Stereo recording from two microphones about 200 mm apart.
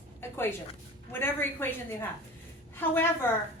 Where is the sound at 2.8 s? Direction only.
10° left (ahead or behind).